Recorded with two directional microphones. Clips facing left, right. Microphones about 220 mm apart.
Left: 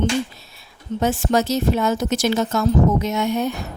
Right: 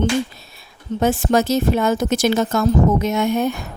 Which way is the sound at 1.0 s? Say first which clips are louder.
Right 2 dB; 50° right (ahead or behind).